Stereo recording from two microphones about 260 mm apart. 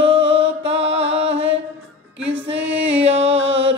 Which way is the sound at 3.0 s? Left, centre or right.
Right.